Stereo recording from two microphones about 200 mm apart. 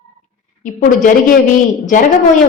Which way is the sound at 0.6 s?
40° left (ahead or behind).